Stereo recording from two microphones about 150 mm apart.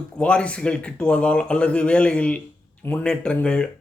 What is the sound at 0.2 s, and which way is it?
Speech, 10° left (ahead or behind).